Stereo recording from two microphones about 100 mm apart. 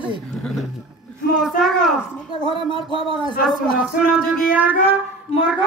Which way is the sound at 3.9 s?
10° right (ahead or behind).